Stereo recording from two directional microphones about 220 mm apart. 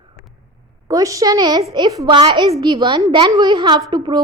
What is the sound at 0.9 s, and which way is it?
A woman's voice, 15° right (ahead or behind).